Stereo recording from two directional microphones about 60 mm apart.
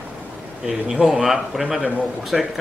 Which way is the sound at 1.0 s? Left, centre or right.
Centre.